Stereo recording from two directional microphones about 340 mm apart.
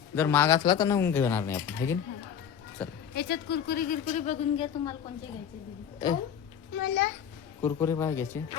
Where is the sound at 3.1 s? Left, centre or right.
Left.